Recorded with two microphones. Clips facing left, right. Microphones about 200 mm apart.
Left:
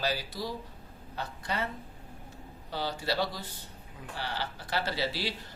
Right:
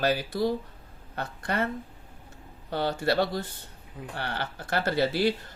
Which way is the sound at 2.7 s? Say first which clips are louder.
Right 6 dB; 55° right (ahead or behind).